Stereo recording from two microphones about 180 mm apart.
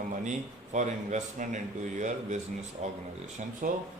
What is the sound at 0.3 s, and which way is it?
A man's voice, 40° right (ahead or behind).